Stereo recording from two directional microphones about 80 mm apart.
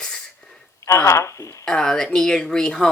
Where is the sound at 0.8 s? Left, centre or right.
Left.